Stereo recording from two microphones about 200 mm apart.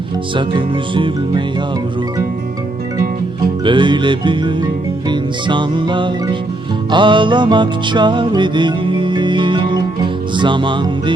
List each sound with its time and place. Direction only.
0.3 s speech: 25° right (ahead or behind)
3.4 s music: 25° right (ahead or behind)